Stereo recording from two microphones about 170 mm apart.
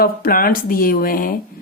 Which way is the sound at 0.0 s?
60° left (ahead or behind).